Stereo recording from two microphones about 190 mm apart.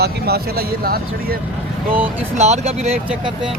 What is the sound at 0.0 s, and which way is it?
Speech, 55° right (ahead or behind).